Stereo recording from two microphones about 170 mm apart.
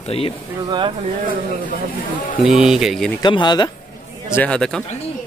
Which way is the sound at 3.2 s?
25° left (ahead or behind).